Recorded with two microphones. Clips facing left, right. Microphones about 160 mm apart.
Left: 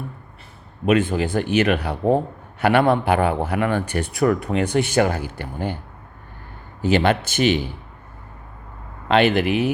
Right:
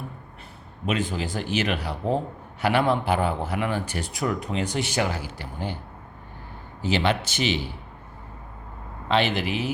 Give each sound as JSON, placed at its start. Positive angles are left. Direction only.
{"t": 0.9, "sound": "speech", "side_deg": 60}
{"t": 6.8, "sound": "speech", "side_deg": 55}
{"t": 9.0, "sound": "speech", "side_deg": 55}